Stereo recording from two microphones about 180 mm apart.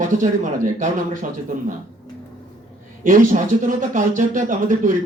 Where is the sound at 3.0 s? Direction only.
45° right (ahead or behind).